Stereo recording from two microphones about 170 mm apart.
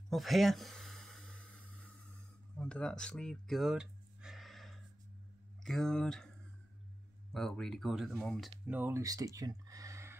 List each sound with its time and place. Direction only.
0.1 s a sound: centre (ahead or behind)
5.6 s speech: 5° left (ahead or behind)
7.3 s speech: 5° left (ahead or behind)
8.6 s speech: 10° right (ahead or behind)